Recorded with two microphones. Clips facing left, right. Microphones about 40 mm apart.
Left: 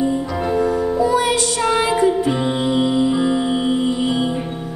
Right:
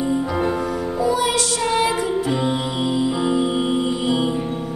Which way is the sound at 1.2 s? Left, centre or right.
Left.